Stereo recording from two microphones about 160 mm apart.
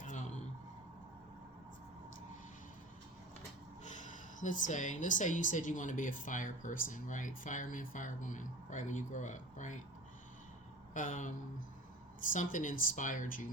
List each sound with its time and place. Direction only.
0.0 s a sound: 50° left (ahead or behind)
3.8 s a woman's voice: 50° left (ahead or behind)
10.9 s a woman's voice: 55° left (ahead or behind)